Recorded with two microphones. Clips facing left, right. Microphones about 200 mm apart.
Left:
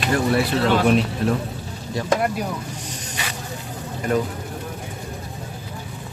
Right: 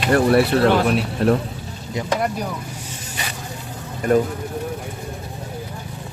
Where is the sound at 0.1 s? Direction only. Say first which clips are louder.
Right 5 dB; 60° right (ahead or behind).